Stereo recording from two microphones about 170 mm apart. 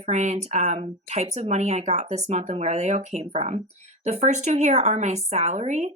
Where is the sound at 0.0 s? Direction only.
40° right (ahead or behind).